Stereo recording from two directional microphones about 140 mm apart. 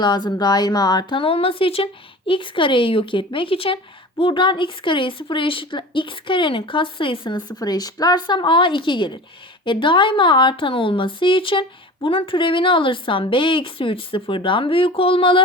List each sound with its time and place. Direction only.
0.0 s speech: 30° left (ahead or behind)